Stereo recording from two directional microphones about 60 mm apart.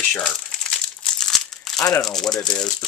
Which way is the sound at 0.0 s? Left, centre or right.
Centre.